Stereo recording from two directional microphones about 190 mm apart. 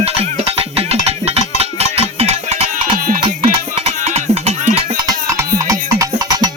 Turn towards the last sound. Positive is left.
turn(degrees=-15)  # may be behind; listen again after turning